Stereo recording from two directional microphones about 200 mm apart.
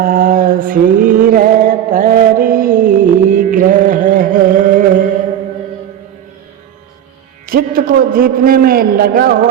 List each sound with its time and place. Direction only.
0.0 s mantra: 45° right (ahead or behind)
7.4 s a man's voice: 45° right (ahead or behind)